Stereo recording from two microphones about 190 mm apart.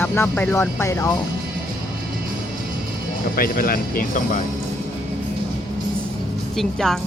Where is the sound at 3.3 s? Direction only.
50° left (ahead or behind).